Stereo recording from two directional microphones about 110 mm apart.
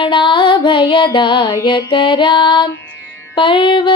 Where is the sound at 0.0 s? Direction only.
50° left (ahead or behind).